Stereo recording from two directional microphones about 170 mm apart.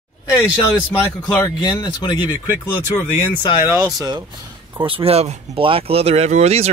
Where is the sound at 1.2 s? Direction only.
25° left (ahead or behind).